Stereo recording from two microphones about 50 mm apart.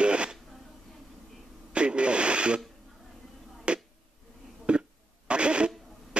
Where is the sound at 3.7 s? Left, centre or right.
Right.